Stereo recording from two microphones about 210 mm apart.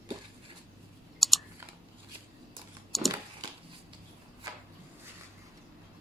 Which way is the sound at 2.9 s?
Centre (ahead or behind).